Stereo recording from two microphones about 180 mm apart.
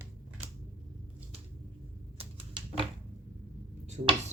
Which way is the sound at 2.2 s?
30° right (ahead or behind).